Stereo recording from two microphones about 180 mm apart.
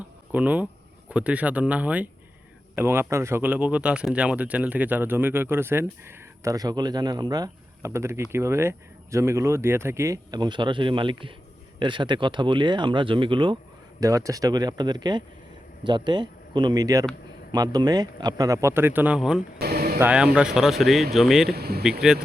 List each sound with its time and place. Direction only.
0.3 s speech: 10° right (ahead or behind)
19.5 s a sound: 60° right (ahead or behind)
20.0 s speech: 5° right (ahead or behind)
21.5 s speech: 60° right (ahead or behind)
21.8 s speech: 5° right (ahead or behind)